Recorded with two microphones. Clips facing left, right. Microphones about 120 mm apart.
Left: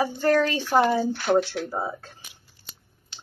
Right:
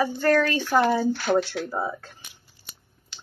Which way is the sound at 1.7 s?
35° left (ahead or behind).